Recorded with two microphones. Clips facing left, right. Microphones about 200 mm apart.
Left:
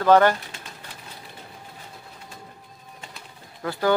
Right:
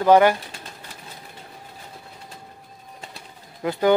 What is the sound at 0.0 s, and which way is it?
Speech, 10° right (ahead or behind).